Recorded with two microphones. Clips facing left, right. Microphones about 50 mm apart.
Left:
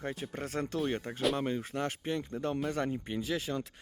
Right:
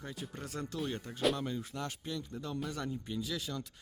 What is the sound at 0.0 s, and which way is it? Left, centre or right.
Speech, left.